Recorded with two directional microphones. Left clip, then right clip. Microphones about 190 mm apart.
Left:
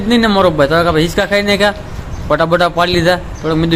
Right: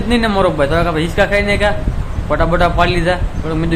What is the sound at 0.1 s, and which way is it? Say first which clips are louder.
A man's voice: left 3 dB; 25° left (ahead or behind).